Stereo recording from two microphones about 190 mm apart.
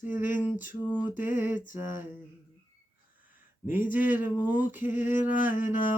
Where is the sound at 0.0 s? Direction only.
10° right (ahead or behind).